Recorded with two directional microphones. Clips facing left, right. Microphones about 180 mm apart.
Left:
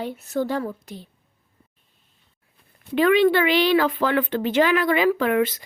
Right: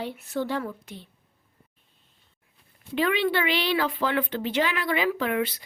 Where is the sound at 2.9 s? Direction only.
50° left (ahead or behind).